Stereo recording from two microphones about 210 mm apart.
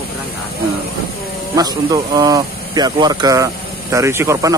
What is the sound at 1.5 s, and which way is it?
A man's voice, 20° right (ahead or behind).